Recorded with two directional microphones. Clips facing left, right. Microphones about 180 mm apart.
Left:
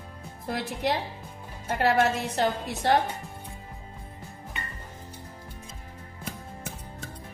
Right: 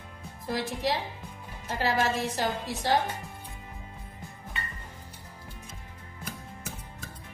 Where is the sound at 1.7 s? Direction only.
65° left (ahead or behind).